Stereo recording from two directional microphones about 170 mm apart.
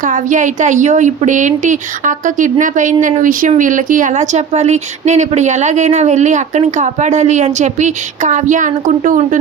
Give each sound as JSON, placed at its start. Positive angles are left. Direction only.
{"t": 0.0, "sound": "a woman's voice", "side_deg": -50}